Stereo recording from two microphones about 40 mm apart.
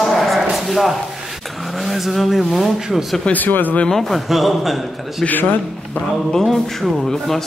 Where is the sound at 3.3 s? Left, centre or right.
Left.